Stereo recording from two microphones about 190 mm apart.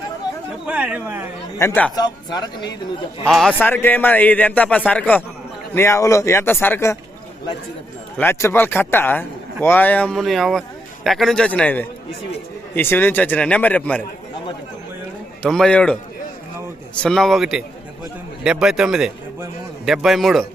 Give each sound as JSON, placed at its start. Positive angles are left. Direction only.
{"t": 0.7, "sound": "speech", "side_deg": -5}
{"t": 1.5, "sound": "a man's voice", "side_deg": 10}
{"t": 3.2, "sound": "a man's voice", "side_deg": 5}
{"t": 8.2, "sound": "a man's voice", "side_deg": 15}
{"t": 15.4, "sound": "a man's voice", "side_deg": 5}
{"t": 17.0, "sound": "a man's voice", "side_deg": 0}